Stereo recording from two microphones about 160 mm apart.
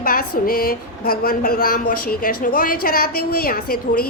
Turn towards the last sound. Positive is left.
turn(degrees=70)  # may be behind; listen again after turning